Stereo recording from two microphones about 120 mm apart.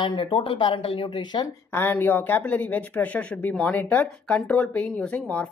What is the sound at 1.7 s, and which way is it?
Speech, 15° left (ahead or behind).